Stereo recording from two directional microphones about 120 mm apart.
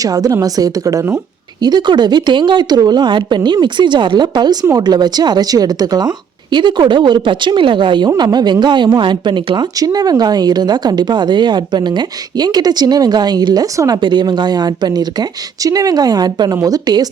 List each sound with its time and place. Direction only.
0.0 s a woman's voice: 30° right (ahead or behind)
1.6 s a woman's voice: 35° right (ahead or behind)